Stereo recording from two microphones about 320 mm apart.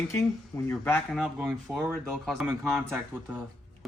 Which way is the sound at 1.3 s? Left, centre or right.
Centre.